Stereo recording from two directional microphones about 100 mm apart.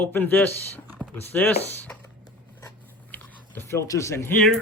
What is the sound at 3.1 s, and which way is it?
Speech, 20° left (ahead or behind).